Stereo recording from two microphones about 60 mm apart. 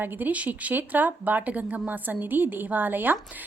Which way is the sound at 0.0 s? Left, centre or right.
Right.